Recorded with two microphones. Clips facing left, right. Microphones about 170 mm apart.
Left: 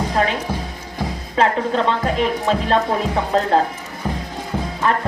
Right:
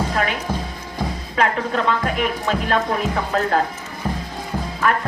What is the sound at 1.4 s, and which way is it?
Speech, 30° left (ahead or behind).